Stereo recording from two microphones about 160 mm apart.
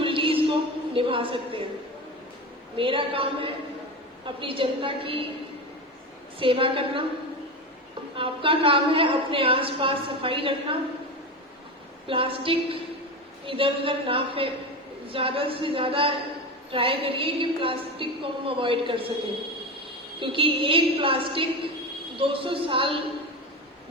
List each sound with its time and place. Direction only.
0.0 s a sound: 35° right (ahead or behind)
2.7 s a woman's voice: 35° right (ahead or behind)
6.4 s a woman's voice: 35° right (ahead or behind)
8.2 s a woman's voice: 35° right (ahead or behind)
12.0 s a woman's voice: 35° right (ahead or behind)
20.1 s a woman's voice: 30° right (ahead or behind)